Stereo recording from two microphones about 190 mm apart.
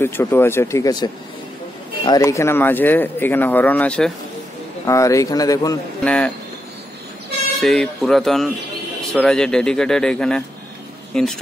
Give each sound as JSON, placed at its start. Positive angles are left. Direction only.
{"t": 0.0, "sound": "speech", "side_deg": 10}
{"t": 6.0, "sound": "speech", "side_deg": 5}
{"t": 7.5, "sound": "speech", "side_deg": 0}